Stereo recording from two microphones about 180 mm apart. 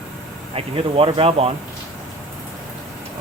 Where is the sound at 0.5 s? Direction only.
30° right (ahead or behind).